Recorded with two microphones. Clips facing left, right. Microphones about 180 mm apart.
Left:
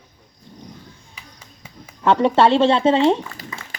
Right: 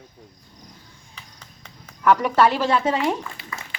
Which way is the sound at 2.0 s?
25° left (ahead or behind).